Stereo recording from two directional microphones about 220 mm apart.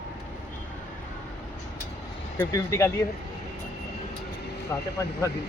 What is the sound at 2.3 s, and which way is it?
Speech, 10° left (ahead or behind).